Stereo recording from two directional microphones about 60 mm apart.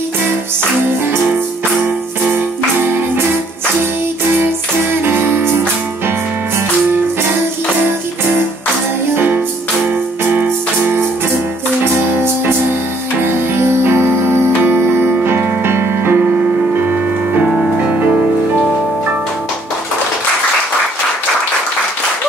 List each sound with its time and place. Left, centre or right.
5.0 s music: right
9.1 s music: right
13.6 s music: right